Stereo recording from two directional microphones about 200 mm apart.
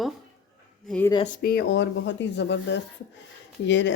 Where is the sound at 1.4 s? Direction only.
55° left (ahead or behind).